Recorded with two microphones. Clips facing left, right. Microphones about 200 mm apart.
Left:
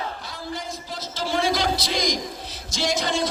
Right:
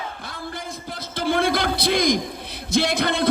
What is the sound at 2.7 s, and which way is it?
Music, 60° right (ahead or behind).